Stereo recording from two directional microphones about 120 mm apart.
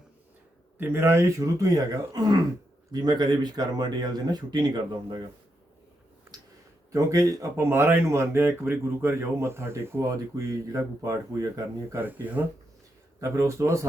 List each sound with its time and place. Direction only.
0.8 s speech: 15° right (ahead or behind); by 5.2 s 40° right (ahead or behind)
6.3 s a sound: 25° right (ahead or behind)
6.9 s speech: 30° right (ahead or behind)
13.1 s speech: 25° right (ahead or behind)